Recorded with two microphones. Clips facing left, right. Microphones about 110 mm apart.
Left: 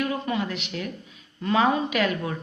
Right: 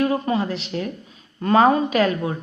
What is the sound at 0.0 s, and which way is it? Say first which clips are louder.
Speech: right 6 dB; 35° right (ahead or behind).